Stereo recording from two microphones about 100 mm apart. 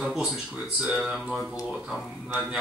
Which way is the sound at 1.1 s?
5° left (ahead or behind).